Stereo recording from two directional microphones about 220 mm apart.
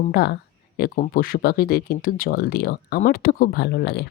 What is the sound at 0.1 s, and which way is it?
Speech, 45° left (ahead or behind).